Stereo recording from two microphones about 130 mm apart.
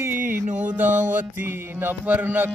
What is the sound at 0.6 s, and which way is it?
Music, 15° right (ahead or behind).